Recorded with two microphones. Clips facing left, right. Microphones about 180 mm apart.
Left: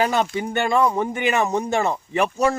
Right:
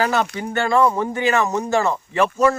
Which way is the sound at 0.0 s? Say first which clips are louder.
Even; 20° left (ahead or behind).